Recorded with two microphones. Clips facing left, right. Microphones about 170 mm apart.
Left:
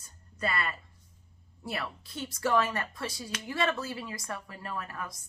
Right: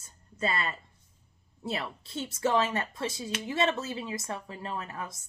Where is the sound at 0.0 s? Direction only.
25° right (ahead or behind).